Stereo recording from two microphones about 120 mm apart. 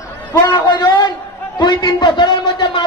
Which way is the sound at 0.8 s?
40° left (ahead or behind).